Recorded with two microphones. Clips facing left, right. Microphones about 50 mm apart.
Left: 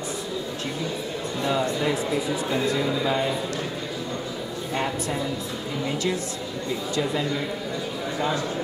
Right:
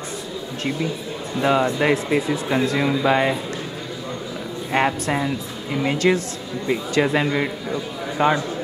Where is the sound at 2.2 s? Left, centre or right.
Right.